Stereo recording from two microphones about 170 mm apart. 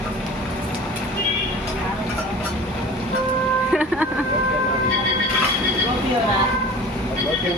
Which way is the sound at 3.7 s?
5° right (ahead or behind).